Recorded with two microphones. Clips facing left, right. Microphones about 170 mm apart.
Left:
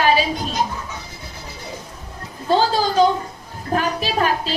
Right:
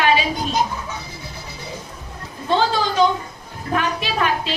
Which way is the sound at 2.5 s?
40° left (ahead or behind).